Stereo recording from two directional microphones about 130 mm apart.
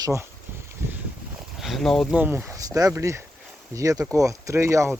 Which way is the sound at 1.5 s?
Centre (ahead or behind).